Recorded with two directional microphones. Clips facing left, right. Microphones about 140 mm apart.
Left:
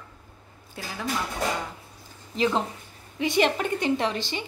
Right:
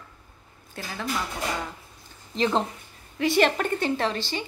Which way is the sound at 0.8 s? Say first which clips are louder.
Even; 10° left (ahead or behind).